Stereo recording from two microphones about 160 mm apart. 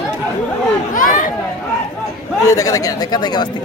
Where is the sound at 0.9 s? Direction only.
55° left (ahead or behind).